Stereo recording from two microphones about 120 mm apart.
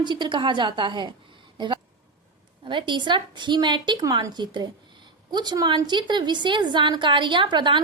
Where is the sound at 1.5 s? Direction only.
40° right (ahead or behind).